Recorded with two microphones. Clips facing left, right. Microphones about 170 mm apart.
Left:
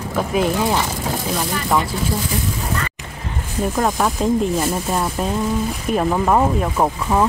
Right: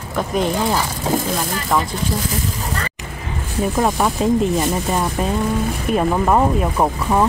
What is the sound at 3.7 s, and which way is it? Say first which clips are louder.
Speech: right 1 dB; 5° right (ahead or behind).